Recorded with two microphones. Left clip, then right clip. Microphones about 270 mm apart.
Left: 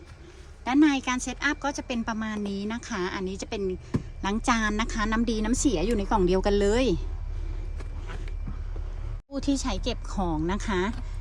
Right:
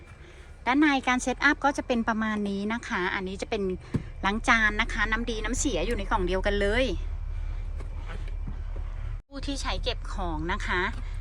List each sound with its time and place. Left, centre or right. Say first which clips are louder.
0.6 s speech: even; centre
9.3 s speech: left 4 dB; left